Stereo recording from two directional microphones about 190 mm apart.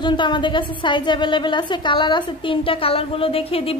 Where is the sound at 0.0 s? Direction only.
25° left (ahead or behind).